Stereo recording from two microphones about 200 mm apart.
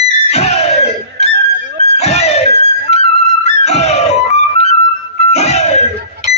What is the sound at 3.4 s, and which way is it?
Music, 35° left (ahead or behind).